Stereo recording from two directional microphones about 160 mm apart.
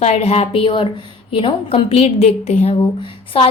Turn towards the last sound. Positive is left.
turn(degrees=35)  # may be behind; listen again after turning